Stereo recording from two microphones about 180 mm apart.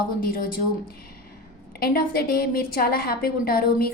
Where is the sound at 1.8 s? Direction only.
55° left (ahead or behind).